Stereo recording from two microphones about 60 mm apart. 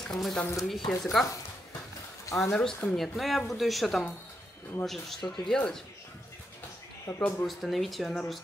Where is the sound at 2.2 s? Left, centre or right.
Left.